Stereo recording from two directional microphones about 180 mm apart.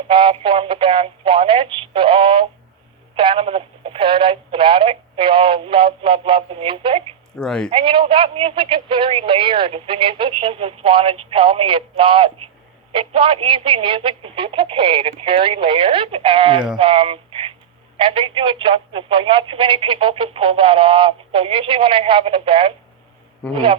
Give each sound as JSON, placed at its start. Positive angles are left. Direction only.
{"t": 0.1, "sound": "speech", "side_deg": -30}
{"t": 7.3, "sound": "speech", "side_deg": 5}
{"t": 7.7, "sound": "speech", "side_deg": -30}